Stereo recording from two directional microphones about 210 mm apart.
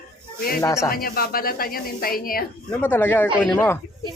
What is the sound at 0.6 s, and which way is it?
Speech, 15° left (ahead or behind).